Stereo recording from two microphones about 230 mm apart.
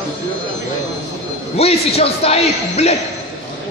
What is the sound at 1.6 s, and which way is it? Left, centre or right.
A man's voice, left.